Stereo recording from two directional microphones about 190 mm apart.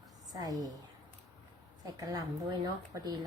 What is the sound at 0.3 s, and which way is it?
Speech, 20° right (ahead or behind).